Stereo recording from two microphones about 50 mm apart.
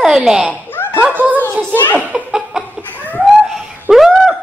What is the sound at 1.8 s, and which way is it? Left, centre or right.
Speech, left.